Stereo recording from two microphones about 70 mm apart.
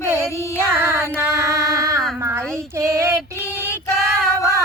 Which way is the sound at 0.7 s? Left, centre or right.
Right.